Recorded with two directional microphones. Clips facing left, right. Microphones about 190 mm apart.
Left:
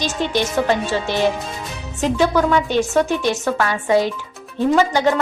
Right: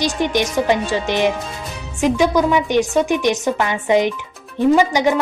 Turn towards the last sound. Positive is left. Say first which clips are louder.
# right 2 dB
turn(degrees=-15)  # may be behind; listen again after turning